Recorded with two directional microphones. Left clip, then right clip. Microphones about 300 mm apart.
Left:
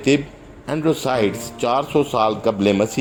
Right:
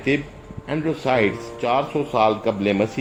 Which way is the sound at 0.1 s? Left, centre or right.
Left.